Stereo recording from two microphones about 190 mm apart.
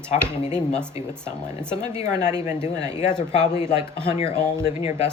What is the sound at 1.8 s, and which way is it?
Speech, 40° left (ahead or behind).